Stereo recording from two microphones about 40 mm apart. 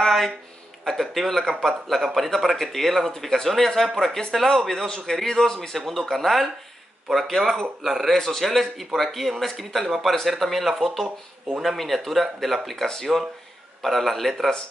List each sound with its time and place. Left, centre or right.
0.0 s a sound: centre
0.8 s a man's voice: centre
13.1 s speech: centre
13.8 s speech: centre